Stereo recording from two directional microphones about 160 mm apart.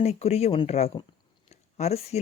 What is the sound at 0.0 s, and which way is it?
Speech, 40° left (ahead or behind).